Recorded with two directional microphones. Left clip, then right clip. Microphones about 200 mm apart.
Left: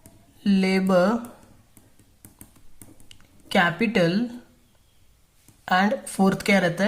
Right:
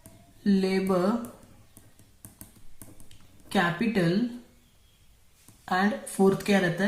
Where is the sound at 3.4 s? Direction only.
40° left (ahead or behind).